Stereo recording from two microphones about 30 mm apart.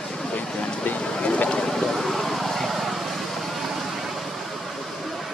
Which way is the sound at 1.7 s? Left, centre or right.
Centre.